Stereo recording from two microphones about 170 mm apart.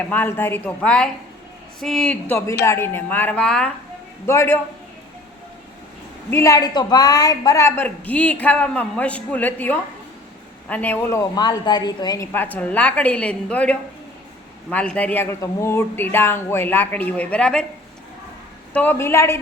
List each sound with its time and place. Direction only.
0.1 s a woman's voice: 10° left (ahead or behind)
2.3 s a woman's voice: 15° left (ahead or behind)
4.3 s a woman's voice: 15° left (ahead or behind)
6.3 s a woman's voice: 15° left (ahead or behind)
18.7 s a woman's voice: 10° left (ahead or behind)